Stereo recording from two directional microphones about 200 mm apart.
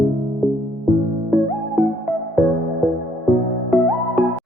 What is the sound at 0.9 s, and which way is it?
Music, centre (ahead or behind).